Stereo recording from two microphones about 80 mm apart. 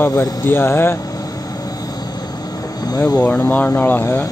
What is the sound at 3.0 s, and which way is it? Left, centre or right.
Speech, centre.